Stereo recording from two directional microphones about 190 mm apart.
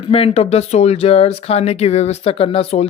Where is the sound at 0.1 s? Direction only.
30° left (ahead or behind).